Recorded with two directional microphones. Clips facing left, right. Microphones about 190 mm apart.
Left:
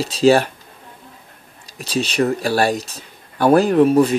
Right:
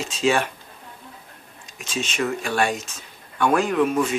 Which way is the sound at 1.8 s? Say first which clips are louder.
Left 7 dB; 35° left (ahead or behind).